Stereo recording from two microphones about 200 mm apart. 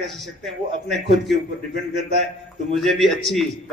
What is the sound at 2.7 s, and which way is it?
Speech, centre (ahead or behind).